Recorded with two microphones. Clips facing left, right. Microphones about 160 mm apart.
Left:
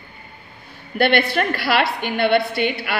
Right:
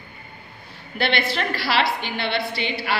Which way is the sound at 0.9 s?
55° left (ahead or behind).